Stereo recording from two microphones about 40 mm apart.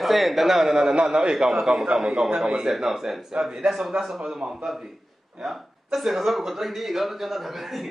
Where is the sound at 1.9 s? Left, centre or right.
Centre.